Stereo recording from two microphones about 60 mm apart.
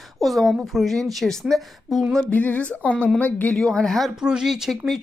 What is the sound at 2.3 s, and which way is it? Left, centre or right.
Speech, left.